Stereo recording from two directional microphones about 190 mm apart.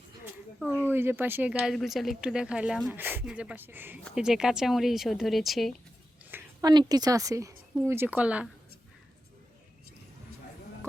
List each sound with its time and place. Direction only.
0.9 s speech: 10° right (ahead or behind)
6.3 s a woman's voice: 20° right (ahead or behind)